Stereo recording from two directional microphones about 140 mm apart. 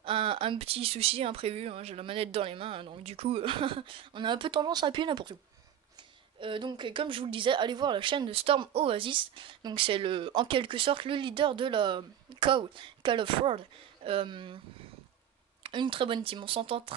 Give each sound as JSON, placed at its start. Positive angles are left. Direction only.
{"t": 0.0, "sound": "a woman's voice", "side_deg": -40}
{"t": 6.4, "sound": "a woman's voice", "side_deg": -35}
{"t": 15.6, "sound": "a woman's voice", "side_deg": -35}